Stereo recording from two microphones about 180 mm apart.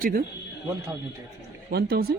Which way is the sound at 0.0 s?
50° right (ahead or behind).